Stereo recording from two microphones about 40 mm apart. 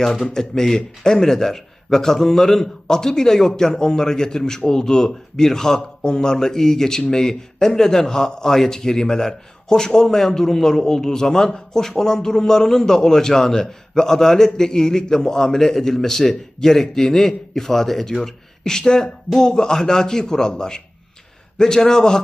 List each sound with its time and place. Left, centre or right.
0.3 s a man's voice: centre